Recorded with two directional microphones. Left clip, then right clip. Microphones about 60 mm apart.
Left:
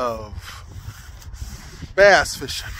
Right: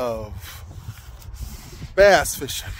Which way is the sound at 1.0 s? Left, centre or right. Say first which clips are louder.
Left 2 dB; centre.